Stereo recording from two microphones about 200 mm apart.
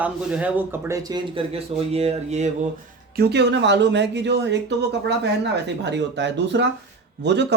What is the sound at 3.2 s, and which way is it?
Speech, 55° right (ahead or behind).